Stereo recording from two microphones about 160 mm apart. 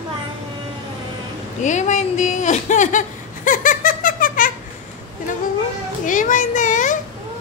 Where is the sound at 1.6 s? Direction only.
50° left (ahead or behind).